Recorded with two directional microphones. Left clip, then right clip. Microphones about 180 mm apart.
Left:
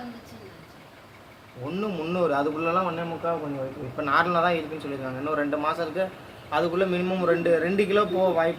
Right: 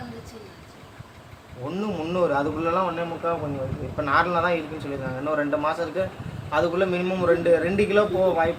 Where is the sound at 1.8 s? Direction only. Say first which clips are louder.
Right 2 dB; 10° left (ahead or behind).